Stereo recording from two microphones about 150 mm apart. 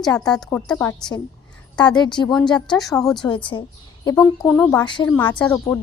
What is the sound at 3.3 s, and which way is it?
Speech, 35° left (ahead or behind).